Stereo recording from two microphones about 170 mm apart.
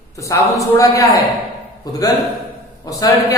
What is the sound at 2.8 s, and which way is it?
Speech, 20° left (ahead or behind).